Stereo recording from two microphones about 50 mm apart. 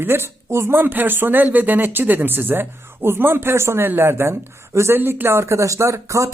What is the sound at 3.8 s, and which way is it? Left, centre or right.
Speech, right.